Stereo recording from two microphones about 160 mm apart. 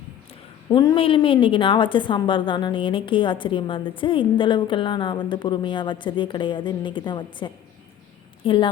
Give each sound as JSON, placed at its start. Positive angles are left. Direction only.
{"t": 0.7, "sound": "a woman's voice", "side_deg": 25}
{"t": 0.9, "sound": "a woman's voice", "side_deg": 35}